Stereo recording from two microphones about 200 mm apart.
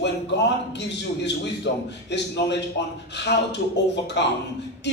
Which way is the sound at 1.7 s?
60° left (ahead or behind).